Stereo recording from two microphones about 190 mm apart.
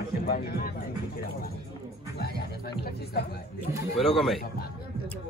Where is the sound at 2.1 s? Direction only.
55° left (ahead or behind).